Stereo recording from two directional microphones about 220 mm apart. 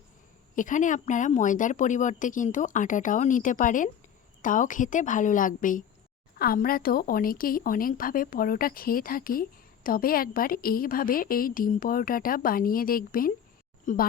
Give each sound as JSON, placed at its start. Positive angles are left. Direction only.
{"t": 0.5, "sound": "a woman's voice", "side_deg": 35}